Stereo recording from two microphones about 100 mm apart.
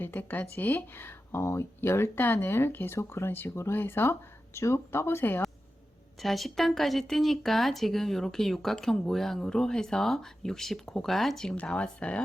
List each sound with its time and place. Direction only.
0.0 s speech: 20° left (ahead or behind)
6.2 s speech: centre (ahead or behind)